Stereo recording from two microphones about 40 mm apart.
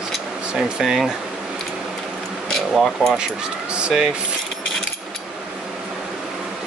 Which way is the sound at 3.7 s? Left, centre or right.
Right.